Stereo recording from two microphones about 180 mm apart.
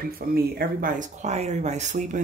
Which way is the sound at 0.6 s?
55° right (ahead or behind).